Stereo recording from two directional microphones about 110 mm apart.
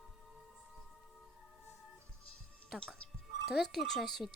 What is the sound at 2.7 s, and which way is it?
Speech, 5° right (ahead or behind).